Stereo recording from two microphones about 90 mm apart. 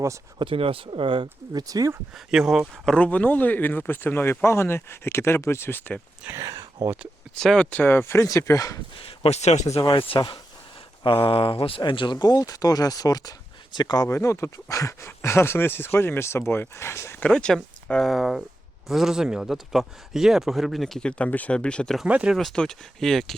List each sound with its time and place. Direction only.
0.3 s speech: 80° right
1.5 s speech: 40° right (ahead or behind)
2.1 s speech: 5° right (ahead or behind)
2.7 s speech: 10° left (ahead or behind)
6.3 s a sound: 40° right (ahead or behind)
7.3 s speech: 10° left (ahead or behind); by 8.8 s 40° left (ahead or behind)
9.0 s speech: 90° left
9.9 s speech: 70° left (ahead or behind)
11.0 s speech: 75° left (ahead or behind)
11.8 s speech: 60° left (ahead or behind)
14.1 s speech: 35° left (ahead or behind)
17.2 s speech: 10° left (ahead or behind)
22.0 s speech: 15° right (ahead or behind)
22.4 s speech: 5° left (ahead or behind)